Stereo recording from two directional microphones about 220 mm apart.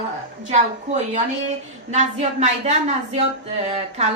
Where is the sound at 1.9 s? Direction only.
30° right (ahead or behind).